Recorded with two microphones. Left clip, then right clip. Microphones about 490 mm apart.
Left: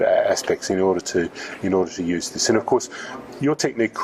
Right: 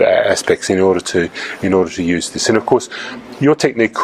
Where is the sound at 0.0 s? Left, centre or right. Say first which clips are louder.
Right 6 dB; right.